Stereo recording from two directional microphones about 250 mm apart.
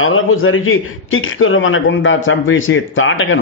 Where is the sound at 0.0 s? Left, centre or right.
Left.